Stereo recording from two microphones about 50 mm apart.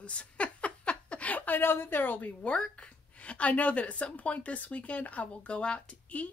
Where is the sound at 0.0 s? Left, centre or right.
Left.